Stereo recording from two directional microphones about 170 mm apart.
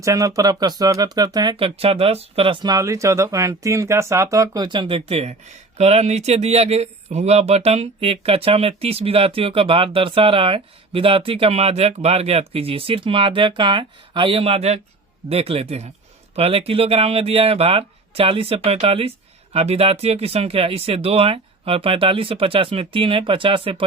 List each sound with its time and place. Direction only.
0.0 s speech: 20° right (ahead or behind)